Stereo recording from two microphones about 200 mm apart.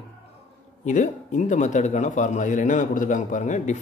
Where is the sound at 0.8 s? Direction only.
40° left (ahead or behind).